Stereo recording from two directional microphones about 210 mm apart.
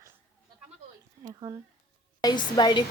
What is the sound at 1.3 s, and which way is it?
Speech, 15° right (ahead or behind).